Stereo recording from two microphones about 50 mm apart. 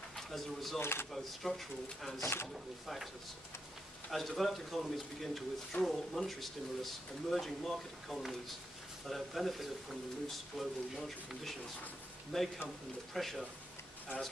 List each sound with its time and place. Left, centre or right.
0.1 s speech: centre
0.7 s speech: left
1.1 s speech: centre
2.1 s speech: left
4.1 s speech: centre